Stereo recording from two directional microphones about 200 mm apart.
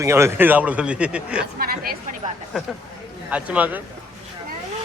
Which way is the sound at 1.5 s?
50° right (ahead or behind).